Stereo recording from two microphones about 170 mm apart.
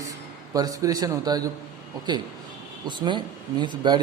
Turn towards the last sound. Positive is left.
turn(degrees=-25)  # may be behind; listen again after turning